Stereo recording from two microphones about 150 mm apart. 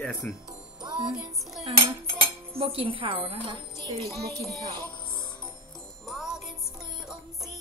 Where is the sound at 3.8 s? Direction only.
20° left (ahead or behind).